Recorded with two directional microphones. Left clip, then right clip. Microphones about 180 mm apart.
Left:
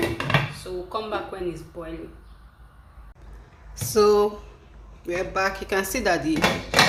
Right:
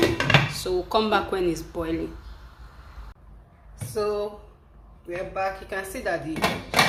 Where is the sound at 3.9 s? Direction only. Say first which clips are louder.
Left 9 dB; 50° left (ahead or behind).